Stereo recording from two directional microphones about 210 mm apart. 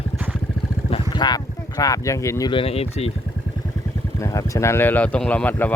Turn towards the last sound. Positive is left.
turn(degrees=10)  # may be behind; listen again after turning